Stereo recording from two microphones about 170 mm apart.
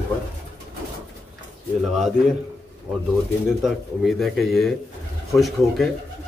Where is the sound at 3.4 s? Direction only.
Centre (ahead or behind).